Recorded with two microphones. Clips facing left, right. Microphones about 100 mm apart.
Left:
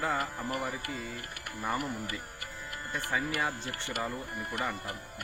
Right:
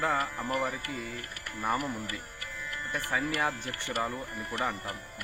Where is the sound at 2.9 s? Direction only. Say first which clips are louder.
Right 1 dB; 20° left (ahead or behind).